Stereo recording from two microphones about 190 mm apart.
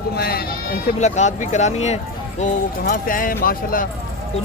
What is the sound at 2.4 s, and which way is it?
Speech, 50° left (ahead or behind).